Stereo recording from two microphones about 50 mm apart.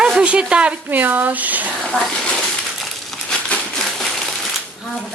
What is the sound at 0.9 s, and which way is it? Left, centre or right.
Speech, right.